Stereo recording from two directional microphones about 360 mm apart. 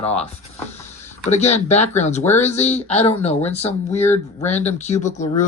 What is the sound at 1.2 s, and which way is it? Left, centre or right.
Speech, centre.